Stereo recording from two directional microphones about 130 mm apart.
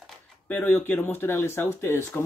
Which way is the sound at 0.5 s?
15° left (ahead or behind).